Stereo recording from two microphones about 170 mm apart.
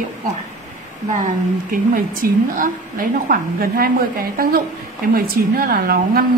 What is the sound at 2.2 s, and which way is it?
A woman's voice, 55° right (ahead or behind).